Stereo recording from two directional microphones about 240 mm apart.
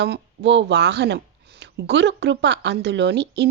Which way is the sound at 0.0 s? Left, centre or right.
Right.